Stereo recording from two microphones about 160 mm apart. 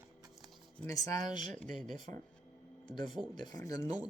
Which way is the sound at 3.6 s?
20° left (ahead or behind).